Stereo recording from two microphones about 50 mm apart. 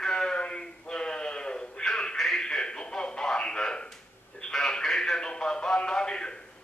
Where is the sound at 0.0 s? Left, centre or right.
Centre.